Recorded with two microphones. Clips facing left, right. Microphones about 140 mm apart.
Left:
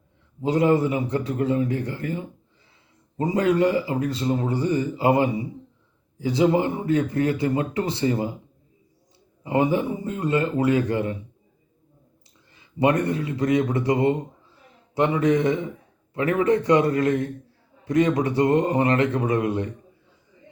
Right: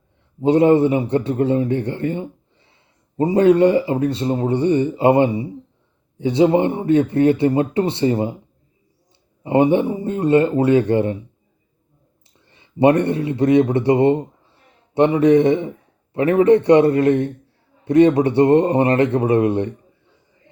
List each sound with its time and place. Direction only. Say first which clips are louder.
0.4 s speech: right 6 dB; 30° right (ahead or behind)
9.4 s speech: right 6 dB; 25° right (ahead or behind)
12.5 s speech: right 6 dB; 30° right (ahead or behind)